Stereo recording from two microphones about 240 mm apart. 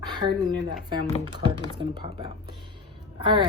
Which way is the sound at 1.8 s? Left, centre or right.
Centre.